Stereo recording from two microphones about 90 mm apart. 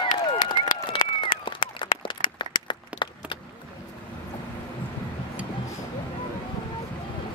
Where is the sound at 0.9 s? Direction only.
70° left (ahead or behind).